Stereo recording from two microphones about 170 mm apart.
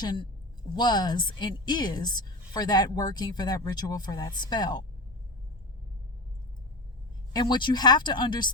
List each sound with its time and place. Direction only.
0.0 s a woman's voice: 25° left (ahead or behind)
7.3 s a woman's voice: 25° left (ahead or behind)